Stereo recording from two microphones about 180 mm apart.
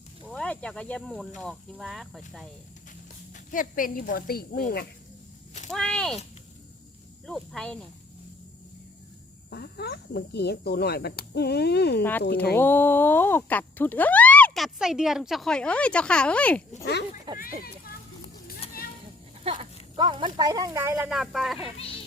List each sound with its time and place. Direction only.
0.3 s speech: 5° left (ahead or behind)
3.3 s speech: 50° left (ahead or behind)
5.7 s speech: 5° left (ahead or behind)
7.3 s speech: 5° left (ahead or behind)
9.5 s speech: 65° left (ahead or behind)
12.5 s speech: 10° left (ahead or behind)
17.3 s speech: 25° right (ahead or behind)
19.5 s speech: 25° right (ahead or behind)
21.1 s speech: centre (ahead or behind)